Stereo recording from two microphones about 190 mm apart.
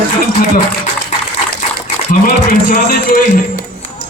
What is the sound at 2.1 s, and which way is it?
Music, 45° left (ahead or behind).